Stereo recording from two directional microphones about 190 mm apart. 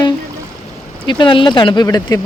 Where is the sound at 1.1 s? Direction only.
25° left (ahead or behind).